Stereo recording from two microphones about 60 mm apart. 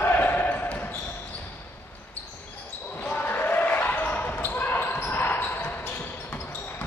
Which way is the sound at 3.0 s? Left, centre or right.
Left.